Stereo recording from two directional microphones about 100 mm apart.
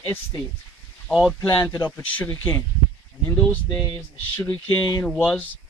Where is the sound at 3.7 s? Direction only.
40° left (ahead or behind).